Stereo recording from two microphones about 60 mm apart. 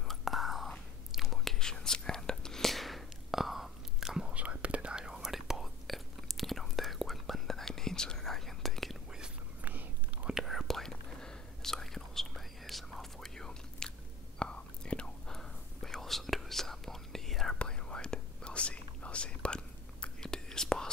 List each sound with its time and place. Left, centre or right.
0.1 s whispering: centre
4.3 s whispering: right; by 8.9 s centre
9.7 s whispering: right
10.4 s whispering: centre